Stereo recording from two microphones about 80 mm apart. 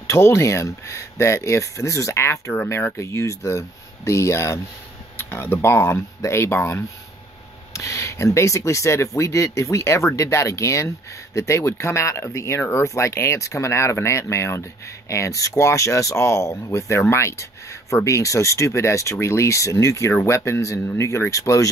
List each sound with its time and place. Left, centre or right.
0.0 s speech: left